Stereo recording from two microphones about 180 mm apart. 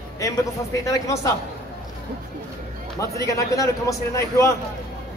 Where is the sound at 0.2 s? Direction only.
15° left (ahead or behind).